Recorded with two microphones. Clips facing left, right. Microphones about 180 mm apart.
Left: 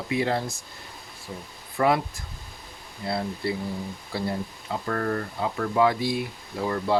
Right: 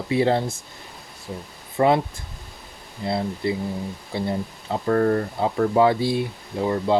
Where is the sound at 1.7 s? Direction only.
25° right (ahead or behind).